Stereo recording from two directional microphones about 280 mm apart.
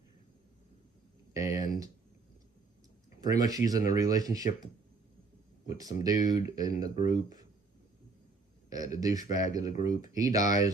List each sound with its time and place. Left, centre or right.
1.3 s a sound: centre
3.2 s speech: centre
5.6 s speech: centre
8.7 s speech: centre